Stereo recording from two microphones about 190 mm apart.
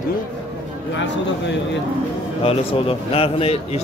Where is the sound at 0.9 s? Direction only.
70° left (ahead or behind).